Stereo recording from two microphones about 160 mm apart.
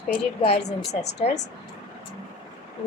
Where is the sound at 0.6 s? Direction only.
90° left.